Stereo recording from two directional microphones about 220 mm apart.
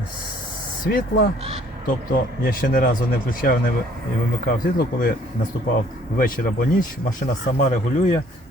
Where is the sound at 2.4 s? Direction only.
40° left (ahead or behind).